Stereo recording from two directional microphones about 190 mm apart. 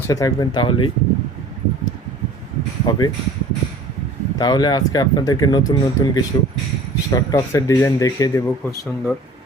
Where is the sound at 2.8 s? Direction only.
20° left (ahead or behind).